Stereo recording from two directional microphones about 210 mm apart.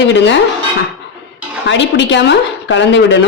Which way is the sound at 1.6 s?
60° left (ahead or behind).